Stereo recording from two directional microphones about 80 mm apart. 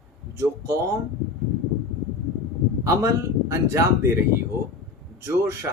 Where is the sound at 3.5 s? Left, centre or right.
Right.